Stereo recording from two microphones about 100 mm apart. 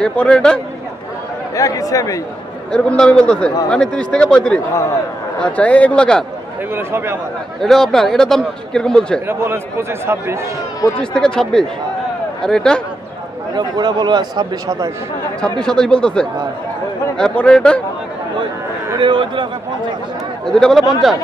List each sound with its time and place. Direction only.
0.0 s speech: 10° left (ahead or behind)
1.5 s speech: 35° left (ahead or behind)
2.7 s speech: 10° left (ahead or behind)
6.7 s speech: 25° right (ahead or behind)
7.6 s speech: 5° left (ahead or behind)
9.3 s speech: 25° right (ahead or behind)
11.0 s speech: 5° left (ahead or behind)
13.6 s speech: 45° right (ahead or behind)
15.6 s speech: 5° left (ahead or behind)
18.9 s speech: 50° right (ahead or behind)
20.4 s speech: 5° left (ahead or behind)